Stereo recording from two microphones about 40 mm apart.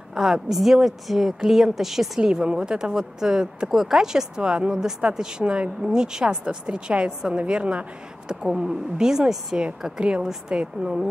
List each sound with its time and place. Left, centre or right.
0.1 s speech: centre
3.7 s speech: centre
4.0 s speech: centre
5.4 s a woman's voice: right
9.9 s a woman's voice: right